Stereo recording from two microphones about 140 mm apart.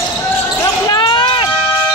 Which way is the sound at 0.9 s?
35° left (ahead or behind).